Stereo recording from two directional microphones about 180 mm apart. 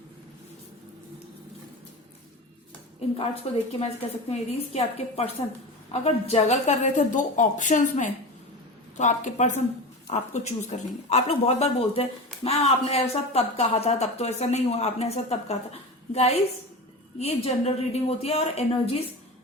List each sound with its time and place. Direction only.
3.4 s a woman's voice: 35° left (ahead or behind)